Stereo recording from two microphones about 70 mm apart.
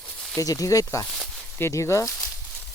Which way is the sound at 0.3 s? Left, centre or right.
Left.